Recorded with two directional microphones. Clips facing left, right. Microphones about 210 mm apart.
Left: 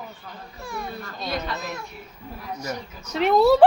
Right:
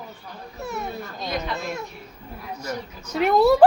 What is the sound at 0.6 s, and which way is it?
Speech, 20° right (ahead or behind).